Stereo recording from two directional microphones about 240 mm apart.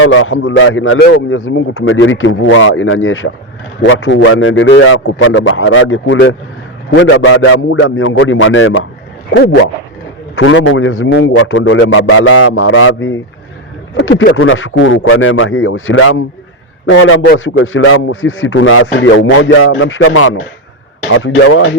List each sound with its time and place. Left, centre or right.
0.0 s a man's voice: left